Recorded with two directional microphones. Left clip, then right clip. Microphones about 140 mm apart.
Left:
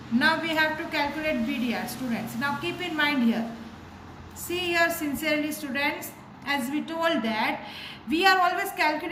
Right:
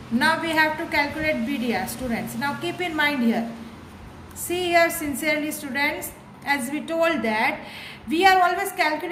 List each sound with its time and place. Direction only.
0.2 s a woman's voice: 35° right (ahead or behind)
4.4 s a woman's voice: 35° right (ahead or behind)